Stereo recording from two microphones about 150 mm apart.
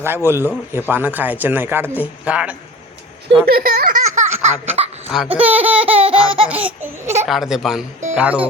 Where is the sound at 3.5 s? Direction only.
85° right.